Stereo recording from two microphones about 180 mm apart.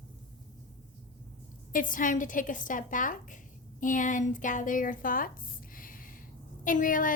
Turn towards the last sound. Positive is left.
turn(degrees=50)  # may be behind; listen again after turning